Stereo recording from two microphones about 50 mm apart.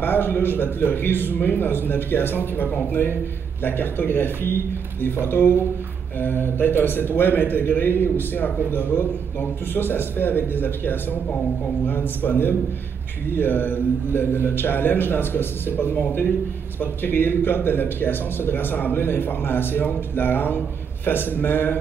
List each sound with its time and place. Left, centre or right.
0.0 s a man's voice: left